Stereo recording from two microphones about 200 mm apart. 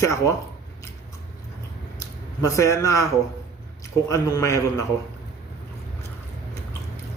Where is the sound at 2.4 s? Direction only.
15° left (ahead or behind).